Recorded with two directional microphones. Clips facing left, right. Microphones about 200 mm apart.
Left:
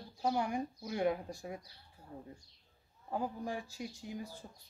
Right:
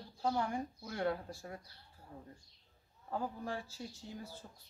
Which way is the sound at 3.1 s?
15° left (ahead or behind).